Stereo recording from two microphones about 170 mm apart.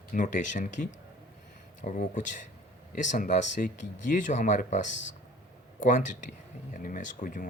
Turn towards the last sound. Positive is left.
turn(degrees=50)  # may be behind; listen again after turning